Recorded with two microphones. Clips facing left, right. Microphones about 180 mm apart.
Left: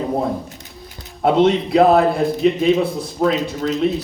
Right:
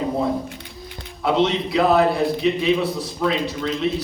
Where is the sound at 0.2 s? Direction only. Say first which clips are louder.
Even; 40° left (ahead or behind).